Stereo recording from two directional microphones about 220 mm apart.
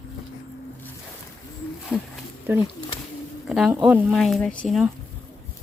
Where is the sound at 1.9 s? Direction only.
5° left (ahead or behind).